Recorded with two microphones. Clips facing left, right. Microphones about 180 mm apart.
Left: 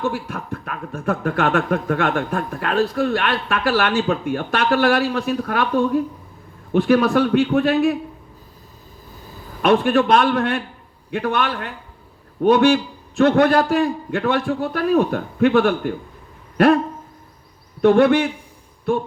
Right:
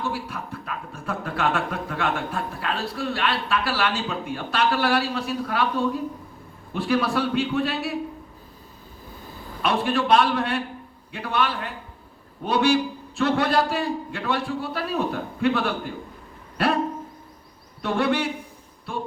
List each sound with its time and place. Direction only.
0.1 s speech: 50° left (ahead or behind)
9.6 s speech: 55° left (ahead or behind)
17.8 s speech: 55° left (ahead or behind)